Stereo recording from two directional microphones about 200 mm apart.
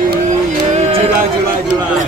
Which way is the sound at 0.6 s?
35° right (ahead or behind).